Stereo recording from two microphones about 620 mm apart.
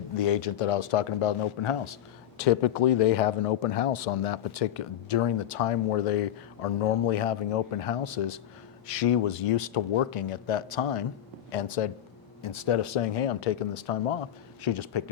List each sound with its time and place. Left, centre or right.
0.2 s speech: left
2.4 s speech: left
12.4 s speech: left
14.6 s speech: left